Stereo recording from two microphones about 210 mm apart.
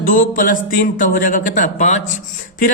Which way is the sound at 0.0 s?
40° left (ahead or behind).